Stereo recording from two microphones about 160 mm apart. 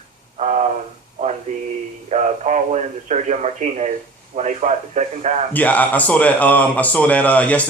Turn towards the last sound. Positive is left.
turn(degrees=10)  # may be behind; listen again after turning